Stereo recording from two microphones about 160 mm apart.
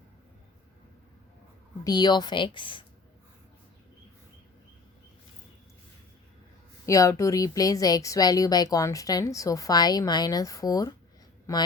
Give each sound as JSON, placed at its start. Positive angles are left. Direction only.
{"t": 1.8, "sound": "speech", "side_deg": 25}
{"t": 6.8, "sound": "speech", "side_deg": 20}